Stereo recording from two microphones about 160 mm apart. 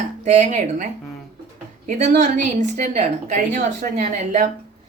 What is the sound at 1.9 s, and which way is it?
A woman's voice, 50° right (ahead or behind).